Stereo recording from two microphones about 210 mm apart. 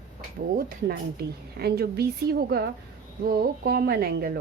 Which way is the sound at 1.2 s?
50° right (ahead or behind).